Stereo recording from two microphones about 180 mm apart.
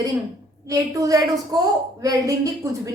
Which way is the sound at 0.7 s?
20° right (ahead or behind).